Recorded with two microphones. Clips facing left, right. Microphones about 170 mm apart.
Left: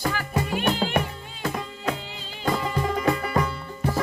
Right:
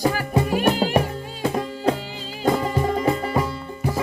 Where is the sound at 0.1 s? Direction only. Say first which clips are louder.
Right 5 dB; 40° right (ahead or behind).